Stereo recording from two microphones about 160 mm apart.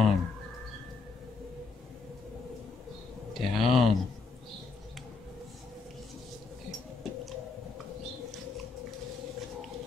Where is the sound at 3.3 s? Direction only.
Centre (ahead or behind).